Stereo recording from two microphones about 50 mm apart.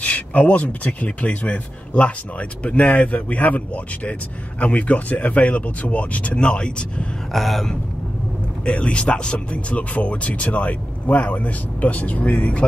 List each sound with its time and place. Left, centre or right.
0.0 s speech: left
7.3 s a sound: centre
8.6 s speech: left